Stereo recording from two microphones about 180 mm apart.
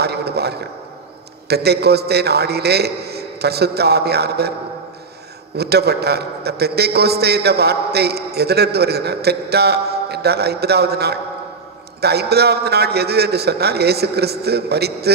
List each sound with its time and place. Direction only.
0.0 s a sound: 65° right (ahead or behind)
1.5 s a man's voice: 65° right (ahead or behind)
5.5 s a man's voice: 65° right (ahead or behind)